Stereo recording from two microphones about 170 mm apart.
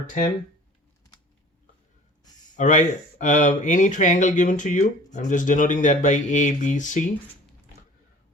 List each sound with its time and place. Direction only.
2.6 s speech: 45° left (ahead or behind)